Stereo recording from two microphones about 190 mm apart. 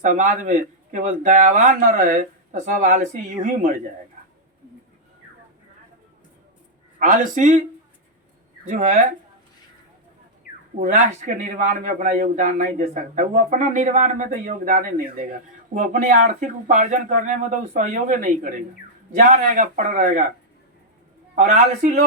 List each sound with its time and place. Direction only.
0.0 s a man's voice: 40° right (ahead or behind)
7.0 s a man's voice: 45° right (ahead or behind)
8.6 s speech: 40° right (ahead or behind)
10.8 s a man's voice: 40° right (ahead or behind)
21.3 s a man's voice: 45° right (ahead or behind)